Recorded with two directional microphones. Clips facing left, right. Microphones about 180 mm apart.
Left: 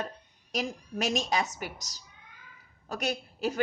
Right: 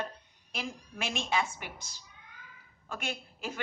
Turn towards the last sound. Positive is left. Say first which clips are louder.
# left 8 dB
turn(degrees=40)  # may be behind; listen again after turning